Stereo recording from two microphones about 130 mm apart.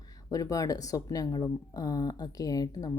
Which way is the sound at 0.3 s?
25° left (ahead or behind).